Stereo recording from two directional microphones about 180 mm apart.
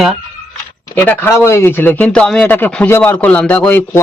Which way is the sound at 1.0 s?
15° left (ahead or behind).